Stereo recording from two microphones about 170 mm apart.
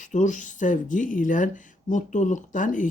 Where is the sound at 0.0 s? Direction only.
45° left (ahead or behind).